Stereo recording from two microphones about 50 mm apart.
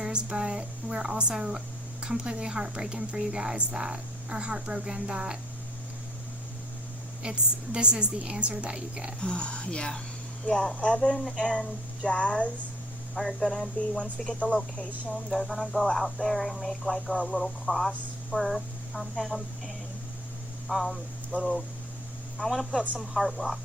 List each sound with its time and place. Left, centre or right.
0.0 s speech: centre
7.2 s a woman's voice: centre
9.2 s speech: left
10.5 s speech: centre
10.8 s speech: left
11.0 s speech: centre
13.1 s speech: centre
13.9 s speech: centre
15.1 s speech: centre
20.7 s speech: centre
22.4 s speech: centre